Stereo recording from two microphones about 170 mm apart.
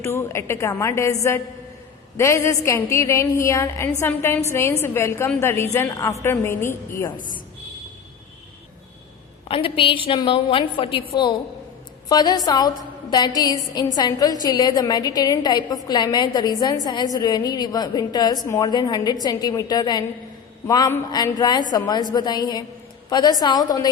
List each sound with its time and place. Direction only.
0.0 s a woman's voice: 15° left (ahead or behind)
7.2 s a woman's voice: 50° left (ahead or behind)
9.5 s a woman's voice: 30° left (ahead or behind)
12.0 s a woman's voice: 25° left (ahead or behind)